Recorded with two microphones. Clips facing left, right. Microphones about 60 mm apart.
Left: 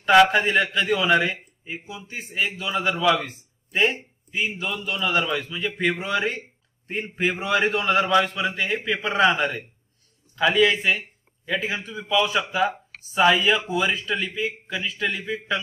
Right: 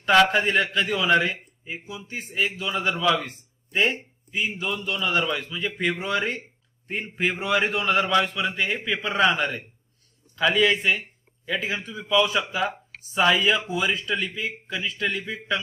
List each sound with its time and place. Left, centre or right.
0.0 s a man's voice: centre
8.0 s a man's voice: centre
8.4 s a man's voice: centre